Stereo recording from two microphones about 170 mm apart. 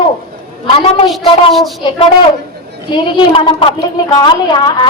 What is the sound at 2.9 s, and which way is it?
A woman's voice, 25° left (ahead or behind).